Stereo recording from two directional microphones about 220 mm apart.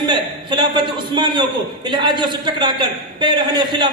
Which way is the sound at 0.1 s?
20° right (ahead or behind).